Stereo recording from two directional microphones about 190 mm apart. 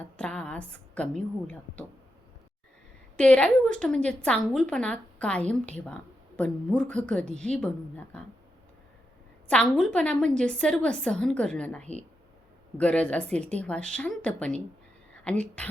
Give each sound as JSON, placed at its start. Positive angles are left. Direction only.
{"t": 0.0, "sound": "a sound", "side_deg": 5}
{"t": 3.2, "sound": "a woman's voice", "side_deg": 5}
{"t": 9.5, "sound": "a woman's voice", "side_deg": 5}